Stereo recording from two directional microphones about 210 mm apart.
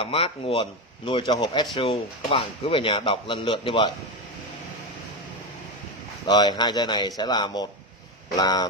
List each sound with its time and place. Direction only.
0.0 s speech: 25° left (ahead or behind)
6.2 s speech: 20° left (ahead or behind)